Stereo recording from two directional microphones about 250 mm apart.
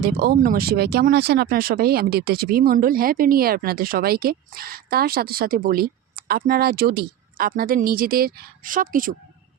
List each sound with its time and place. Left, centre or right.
0.0 s speech: right